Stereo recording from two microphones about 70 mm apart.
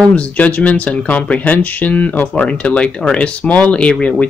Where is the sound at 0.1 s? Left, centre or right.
Centre.